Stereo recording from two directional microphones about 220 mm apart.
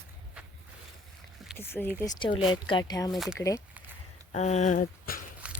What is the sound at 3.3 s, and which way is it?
Speech, 15° left (ahead or behind).